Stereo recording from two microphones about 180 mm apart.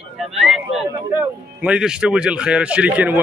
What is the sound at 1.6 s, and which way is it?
Speech, 5° right (ahead or behind).